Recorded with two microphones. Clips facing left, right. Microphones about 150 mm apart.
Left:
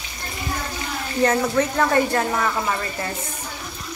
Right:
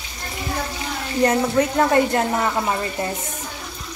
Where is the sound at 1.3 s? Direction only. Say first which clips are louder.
Right 2 dB; 20° right (ahead or behind).